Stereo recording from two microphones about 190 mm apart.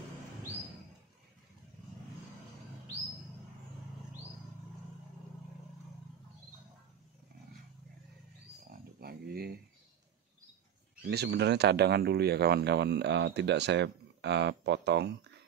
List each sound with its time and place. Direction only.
9.0 s speech: 55° right (ahead or behind)
11.1 s speech: 60° right (ahead or behind)